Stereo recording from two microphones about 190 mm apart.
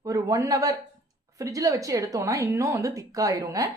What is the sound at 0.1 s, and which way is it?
Speech, 15° right (ahead or behind).